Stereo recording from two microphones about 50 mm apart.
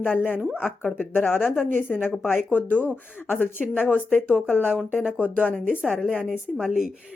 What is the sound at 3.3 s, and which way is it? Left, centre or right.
Speech, left.